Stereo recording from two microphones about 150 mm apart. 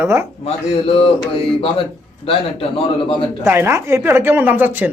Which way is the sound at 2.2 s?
40° left (ahead or behind).